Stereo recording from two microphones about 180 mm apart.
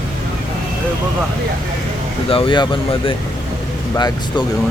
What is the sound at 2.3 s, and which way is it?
Speech, 30° left (ahead or behind).